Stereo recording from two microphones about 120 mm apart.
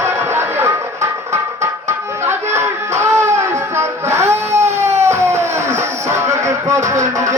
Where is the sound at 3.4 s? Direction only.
20° right (ahead or behind).